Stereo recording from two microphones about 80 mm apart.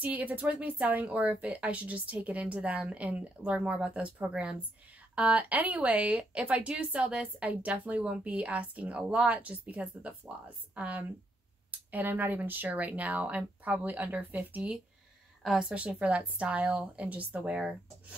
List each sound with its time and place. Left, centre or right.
0.0 s speech: centre